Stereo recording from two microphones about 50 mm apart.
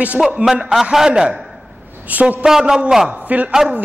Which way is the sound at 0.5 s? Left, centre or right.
Centre.